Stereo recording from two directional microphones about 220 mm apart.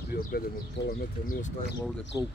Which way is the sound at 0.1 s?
45° left (ahead or behind).